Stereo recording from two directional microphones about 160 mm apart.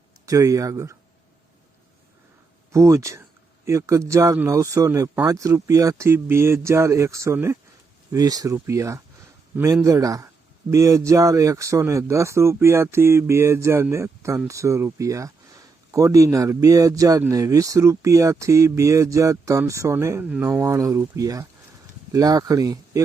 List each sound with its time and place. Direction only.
0.3 s speech: 20° right (ahead or behind)
2.7 s speech: 20° right (ahead or behind)